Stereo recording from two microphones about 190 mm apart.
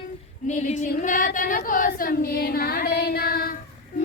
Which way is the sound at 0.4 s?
40° left (ahead or behind).